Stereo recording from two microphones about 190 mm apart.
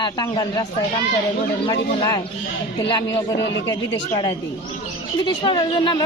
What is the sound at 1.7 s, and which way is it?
Speech, 25° left (ahead or behind).